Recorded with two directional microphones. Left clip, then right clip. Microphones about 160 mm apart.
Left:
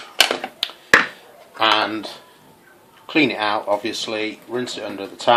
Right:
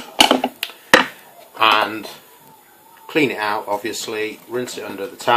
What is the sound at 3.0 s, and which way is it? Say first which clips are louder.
Speech: even; 30° left (ahead or behind).